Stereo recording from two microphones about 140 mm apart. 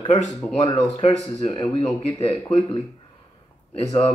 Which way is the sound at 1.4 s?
40° left (ahead or behind).